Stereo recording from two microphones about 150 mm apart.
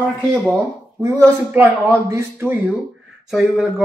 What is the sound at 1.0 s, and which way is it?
Speech, 20° right (ahead or behind).